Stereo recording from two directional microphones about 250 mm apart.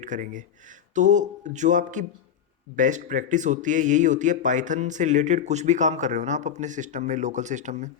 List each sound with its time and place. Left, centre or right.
0.0 s speech: right